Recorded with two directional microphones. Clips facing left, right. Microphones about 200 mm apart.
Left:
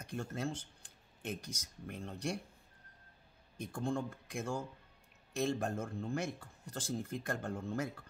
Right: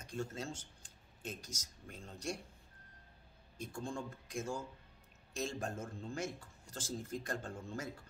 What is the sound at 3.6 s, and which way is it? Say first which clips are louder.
Speech: left 5 dB; 60° left (ahead or behind).